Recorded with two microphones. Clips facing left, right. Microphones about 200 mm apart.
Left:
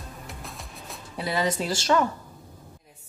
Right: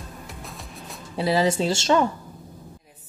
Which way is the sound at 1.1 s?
30° right (ahead or behind).